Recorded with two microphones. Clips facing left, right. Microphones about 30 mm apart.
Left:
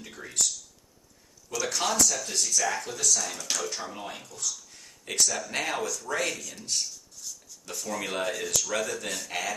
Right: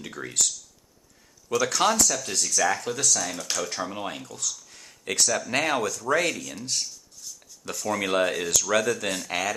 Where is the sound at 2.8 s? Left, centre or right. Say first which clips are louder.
Right 2 dB; right.